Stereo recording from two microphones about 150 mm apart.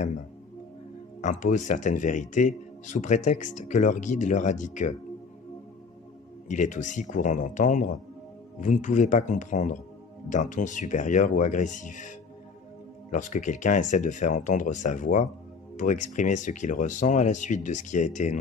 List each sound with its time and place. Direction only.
1.2 s speech: 55° left (ahead or behind)
6.5 s speech: 55° left (ahead or behind)